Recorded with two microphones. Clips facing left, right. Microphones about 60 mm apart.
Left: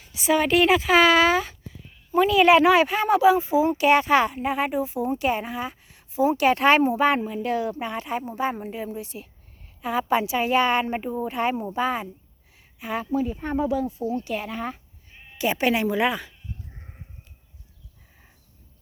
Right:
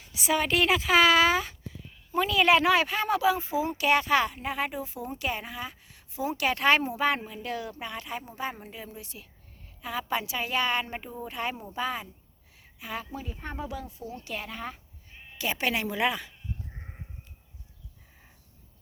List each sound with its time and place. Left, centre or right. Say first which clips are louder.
0.2 s a woman's voice: left 6 dB; centre